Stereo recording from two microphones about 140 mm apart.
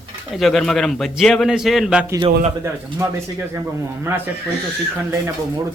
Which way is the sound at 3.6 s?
20° right (ahead or behind).